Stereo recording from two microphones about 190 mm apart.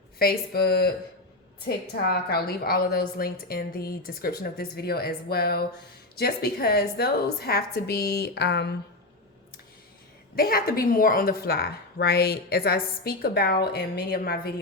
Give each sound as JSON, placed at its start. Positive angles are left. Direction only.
{"t": 0.2, "sound": "a woman's voice", "side_deg": 55}
{"t": 10.3, "sound": "a woman's voice", "side_deg": 50}